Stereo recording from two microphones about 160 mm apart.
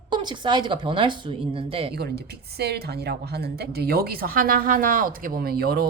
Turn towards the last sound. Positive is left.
turn(degrees=-70)  # may be behind; listen again after turning